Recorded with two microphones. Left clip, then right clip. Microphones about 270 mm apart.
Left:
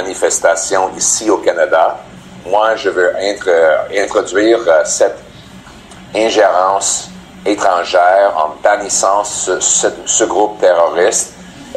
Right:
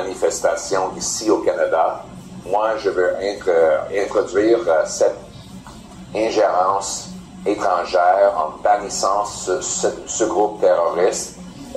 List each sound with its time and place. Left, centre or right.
0.2 s speech: left
6.1 s speech: left
7.4 s speech: left